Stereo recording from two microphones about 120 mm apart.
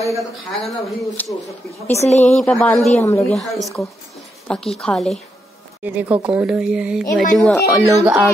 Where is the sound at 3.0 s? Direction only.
25° left (ahead or behind).